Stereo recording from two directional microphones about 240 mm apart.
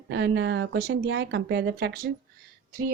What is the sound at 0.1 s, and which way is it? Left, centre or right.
Speech, right.